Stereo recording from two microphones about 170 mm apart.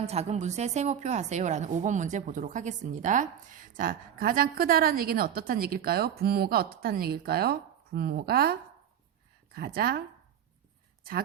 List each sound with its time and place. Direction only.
0.0 s a woman's voice: 40° right (ahead or behind); by 8.5 s 65° right (ahead or behind)
9.6 s a woman's voice: 60° right (ahead or behind)